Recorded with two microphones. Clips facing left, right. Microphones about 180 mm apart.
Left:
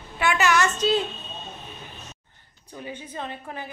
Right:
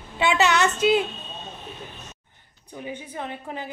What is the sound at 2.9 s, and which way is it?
Speech, 15° right (ahead or behind).